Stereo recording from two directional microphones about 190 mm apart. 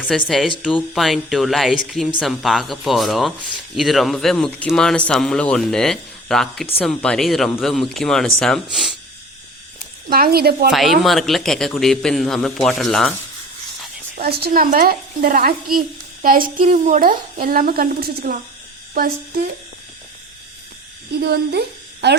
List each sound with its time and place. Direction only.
0.3 s speech: centre (ahead or behind)
10.1 s speech: 55° right (ahead or behind)
10.7 s speech: centre (ahead or behind)
14.2 s a woman's voice: 55° right (ahead or behind)
21.2 s speech: 55° right (ahead or behind)